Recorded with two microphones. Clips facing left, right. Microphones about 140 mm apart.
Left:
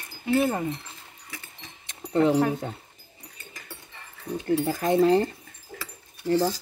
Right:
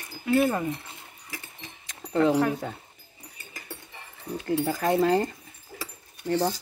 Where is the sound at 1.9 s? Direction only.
25° left (ahead or behind).